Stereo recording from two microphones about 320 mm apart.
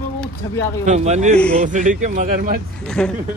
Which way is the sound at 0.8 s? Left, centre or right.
Right.